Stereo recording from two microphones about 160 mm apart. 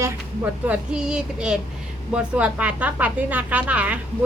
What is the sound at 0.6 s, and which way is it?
A woman's voice, 5° right (ahead or behind).